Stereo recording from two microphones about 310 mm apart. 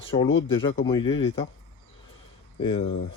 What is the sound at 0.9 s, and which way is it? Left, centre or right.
Speech, centre.